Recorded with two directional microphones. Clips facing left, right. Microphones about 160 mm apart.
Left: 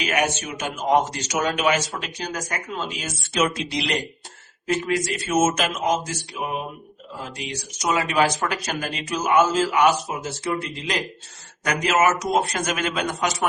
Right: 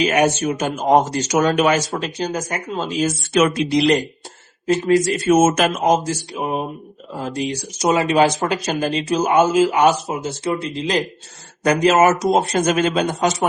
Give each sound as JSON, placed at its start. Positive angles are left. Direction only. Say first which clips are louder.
{"t": 0.0, "sound": "speech", "louder": "right 7 dB", "side_deg": -30}
{"t": 3.3, "sound": "speech", "louder": "right 6 dB", "side_deg": -60}
{"t": 4.6, "sound": "speech", "louder": "right 8 dB", "side_deg": -30}
{"t": 5.3, "sound": "a man's voice", "louder": "right 6 dB", "side_deg": -55}
{"t": 9.5, "sound": "a man's voice", "louder": "right 7 dB", "side_deg": -15}
{"t": 9.7, "sound": "speech", "louder": "right 3 dB", "side_deg": -25}